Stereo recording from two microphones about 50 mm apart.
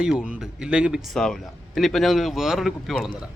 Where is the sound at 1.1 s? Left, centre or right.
Centre.